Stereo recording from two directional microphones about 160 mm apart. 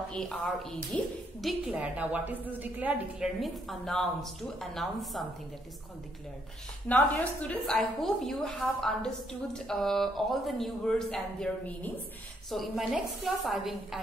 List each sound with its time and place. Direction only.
0.1 s a woman's voice: 5° left (ahead or behind)
6.9 s a woman's voice: 10° left (ahead or behind)